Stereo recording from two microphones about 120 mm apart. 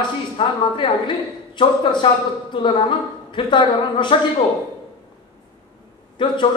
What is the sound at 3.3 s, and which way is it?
Speech, 40° left (ahead or behind).